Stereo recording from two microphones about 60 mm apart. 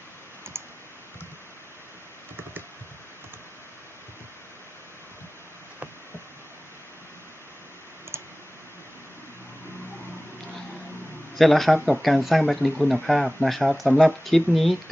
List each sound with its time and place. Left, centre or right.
0.5 s clicking: right
8.1 s clicking: right
11.3 s speech: centre